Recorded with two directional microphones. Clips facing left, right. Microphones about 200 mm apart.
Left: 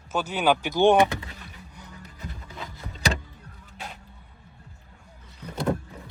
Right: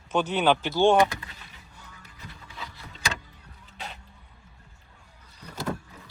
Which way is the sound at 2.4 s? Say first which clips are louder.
Left 4 dB; 45° left (ahead or behind).